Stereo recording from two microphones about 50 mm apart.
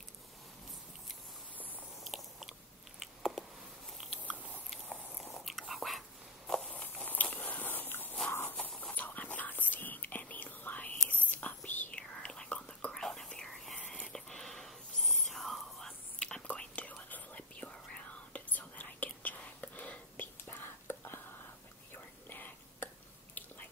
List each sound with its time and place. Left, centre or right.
2.0 s biting: centre
3.2 s a sound: centre
4.0 s biting: centre
6.7 s a sound: left
7.1 s biting: left
8.3 s a sound: left
8.5 s whispering: left
11.9 s whispering: left
12.9 s whispering: centre
16.4 s whispering: left
20.4 s whispering: left
22.3 s whispering: left